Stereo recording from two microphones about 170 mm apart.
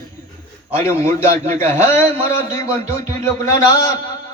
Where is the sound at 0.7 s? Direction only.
15° left (ahead or behind).